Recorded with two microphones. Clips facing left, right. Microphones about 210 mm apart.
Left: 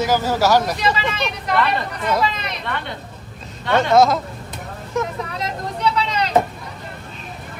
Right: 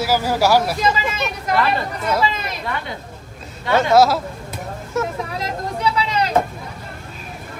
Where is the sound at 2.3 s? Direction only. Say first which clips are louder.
Right 1 dB; 45° right (ahead or behind).